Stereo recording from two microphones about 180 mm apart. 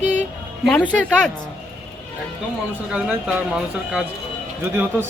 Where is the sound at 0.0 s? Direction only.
45° right (ahead or behind).